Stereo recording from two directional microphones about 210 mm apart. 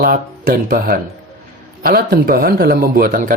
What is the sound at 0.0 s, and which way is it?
Speech, 45° right (ahead or behind).